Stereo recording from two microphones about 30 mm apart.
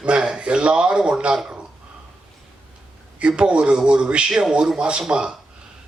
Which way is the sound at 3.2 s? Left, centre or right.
Right.